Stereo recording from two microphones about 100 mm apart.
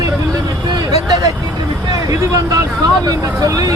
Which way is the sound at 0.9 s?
40° right (ahead or behind).